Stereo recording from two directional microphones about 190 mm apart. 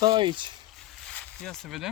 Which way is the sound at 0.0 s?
25° right (ahead or behind).